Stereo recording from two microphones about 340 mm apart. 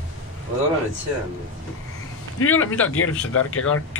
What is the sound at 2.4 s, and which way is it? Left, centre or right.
Speech, left.